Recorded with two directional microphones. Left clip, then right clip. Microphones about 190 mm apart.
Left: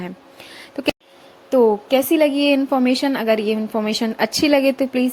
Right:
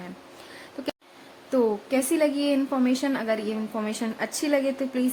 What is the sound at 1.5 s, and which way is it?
A woman's voice, 25° left (ahead or behind).